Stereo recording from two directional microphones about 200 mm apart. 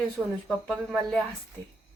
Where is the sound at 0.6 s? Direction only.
Centre (ahead or behind).